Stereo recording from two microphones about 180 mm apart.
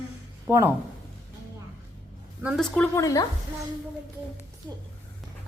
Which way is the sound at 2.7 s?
5° left (ahead or behind).